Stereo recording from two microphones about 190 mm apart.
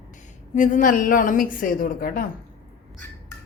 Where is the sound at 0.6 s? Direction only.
45° left (ahead or behind).